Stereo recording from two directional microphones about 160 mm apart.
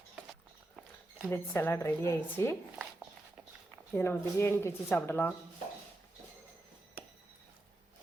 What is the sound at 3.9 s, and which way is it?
Speech, 15° left (ahead or behind).